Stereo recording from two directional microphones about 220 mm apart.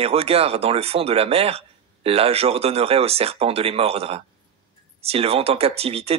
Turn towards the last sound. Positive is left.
turn(degrees=-25)  # may be behind; listen again after turning